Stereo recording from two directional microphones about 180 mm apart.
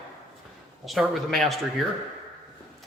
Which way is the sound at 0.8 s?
Centre (ahead or behind).